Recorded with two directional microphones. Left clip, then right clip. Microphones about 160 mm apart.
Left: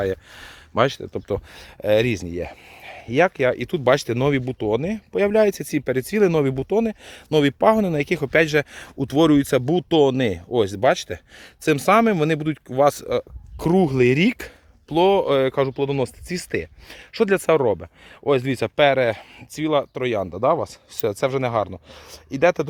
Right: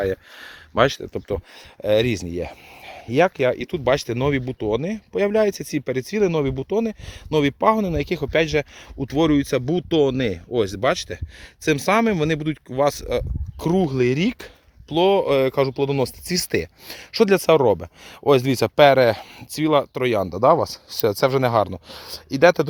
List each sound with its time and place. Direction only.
0.0 s speech: 5° right (ahead or behind)
1.3 s speech: 10° left (ahead or behind)
2.0 s speech: 15° right (ahead or behind)
3.6 s speech: 20° left (ahead or behind); by 13.2 s centre (ahead or behind)
13.6 s speech: 15° left (ahead or behind)
14.8 s speech: centre (ahead or behind)
15.2 s speech: 10° right (ahead or behind); by 22.6 s 35° right (ahead or behind)